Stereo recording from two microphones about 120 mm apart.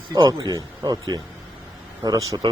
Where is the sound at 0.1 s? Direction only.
35° right (ahead or behind).